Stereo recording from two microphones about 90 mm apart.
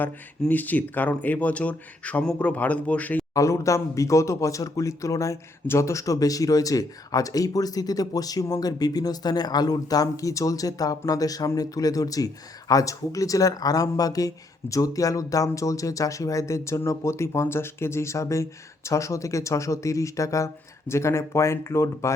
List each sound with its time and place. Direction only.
0.0 s speech: 20° left (ahead or behind)
3.3 s speech: 35° left (ahead or behind)